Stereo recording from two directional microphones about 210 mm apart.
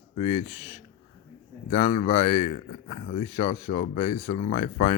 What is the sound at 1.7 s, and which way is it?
A man's voice, 30° left (ahead or behind).